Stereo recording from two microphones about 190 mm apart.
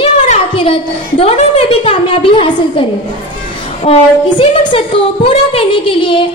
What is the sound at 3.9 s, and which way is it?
A woman's voice, 30° left (ahead or behind).